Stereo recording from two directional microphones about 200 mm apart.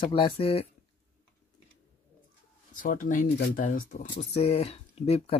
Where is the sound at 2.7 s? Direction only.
40° left (ahead or behind).